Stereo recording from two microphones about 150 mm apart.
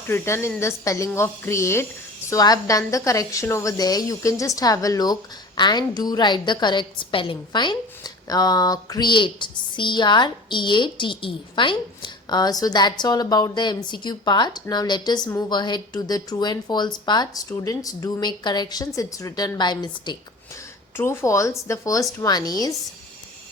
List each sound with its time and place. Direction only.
0.1 s a woman's voice: 15° left (ahead or behind)
20.9 s a woman's voice: 15° left (ahead or behind)